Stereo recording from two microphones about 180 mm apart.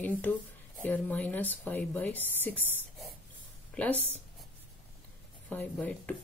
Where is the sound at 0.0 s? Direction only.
10° left (ahead or behind).